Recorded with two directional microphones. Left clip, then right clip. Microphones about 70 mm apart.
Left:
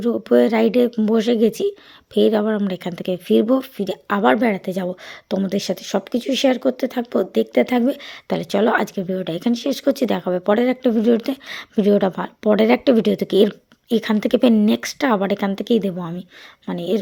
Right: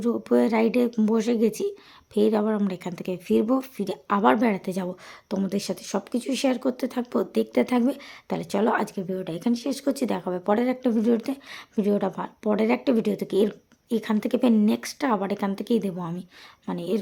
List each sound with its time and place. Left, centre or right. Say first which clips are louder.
0.0 s a woman's voice: left 7 dB; left
3.8 s speech: left 4 dB; left
5.3 s a woman's voice: left 7 dB; left
7.8 s a woman's voice: left 5 dB; left
16.0 s speech: left 4 dB; left
16.6 s a woman's voice: left 6 dB; left